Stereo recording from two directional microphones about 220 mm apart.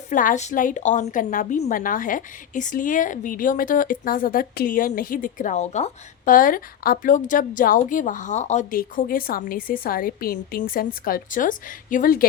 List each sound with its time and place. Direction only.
0.1 s a woman's voice: 35° left (ahead or behind)